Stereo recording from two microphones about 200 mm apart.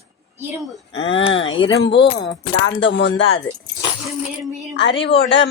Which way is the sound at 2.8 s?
65° left (ahead or behind).